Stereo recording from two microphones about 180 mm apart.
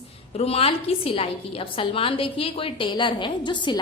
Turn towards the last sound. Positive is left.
turn(degrees=25)  # may be behind; listen again after turning